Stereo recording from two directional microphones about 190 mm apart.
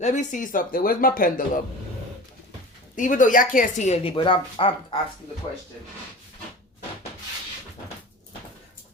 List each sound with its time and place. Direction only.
0.0 s speech: 40° left (ahead or behind)
2.9 s a woman's voice: 45° left (ahead or behind); by 4.9 s 30° left (ahead or behind)